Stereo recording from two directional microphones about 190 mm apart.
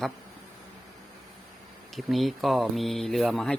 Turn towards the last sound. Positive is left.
turn(degrees=0)  # may be behind; listen again after turning